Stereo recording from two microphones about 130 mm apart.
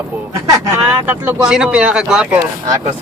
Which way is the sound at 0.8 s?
15° right (ahead or behind).